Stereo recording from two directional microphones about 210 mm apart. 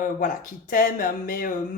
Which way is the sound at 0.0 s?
40° left (ahead or behind).